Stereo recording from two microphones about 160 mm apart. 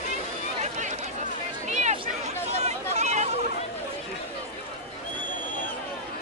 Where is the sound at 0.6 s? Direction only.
50° right (ahead or behind).